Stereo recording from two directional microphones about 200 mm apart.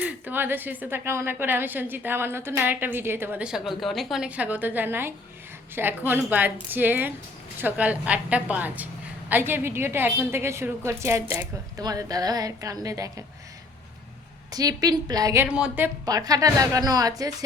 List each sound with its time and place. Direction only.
0.0 s a woman's voice: 10° right (ahead or behind)
14.5 s a woman's voice: 20° right (ahead or behind)